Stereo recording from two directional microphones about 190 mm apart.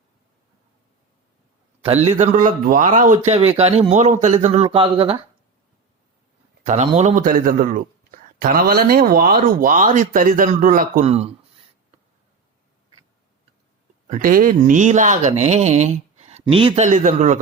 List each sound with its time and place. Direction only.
2.1 s speech: 40° right (ahead or behind)
6.9 s speech: 40° right (ahead or behind)
14.1 s speech: 45° right (ahead or behind)